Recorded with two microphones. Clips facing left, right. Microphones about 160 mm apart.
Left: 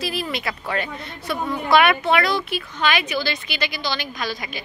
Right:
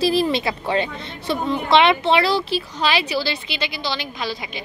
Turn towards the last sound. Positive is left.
turn(degrees=-25)  # may be behind; listen again after turning